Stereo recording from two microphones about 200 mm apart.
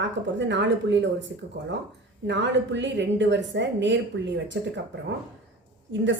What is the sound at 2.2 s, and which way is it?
A woman's voice, 60° right (ahead or behind).